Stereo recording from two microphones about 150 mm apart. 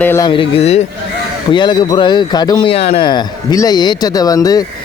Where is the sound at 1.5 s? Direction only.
30° left (ahead or behind).